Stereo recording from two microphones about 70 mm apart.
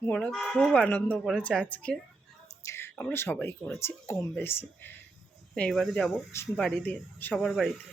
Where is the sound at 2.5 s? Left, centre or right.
Left.